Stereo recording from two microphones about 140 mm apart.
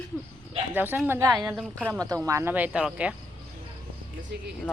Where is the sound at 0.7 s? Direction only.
15° right (ahead or behind).